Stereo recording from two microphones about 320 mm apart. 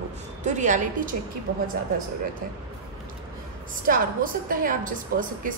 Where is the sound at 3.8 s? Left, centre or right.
Right.